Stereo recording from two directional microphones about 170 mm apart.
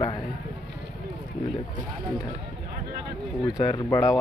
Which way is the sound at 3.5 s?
20° left (ahead or behind).